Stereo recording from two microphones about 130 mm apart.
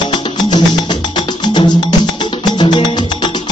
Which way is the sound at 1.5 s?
35° left (ahead or behind).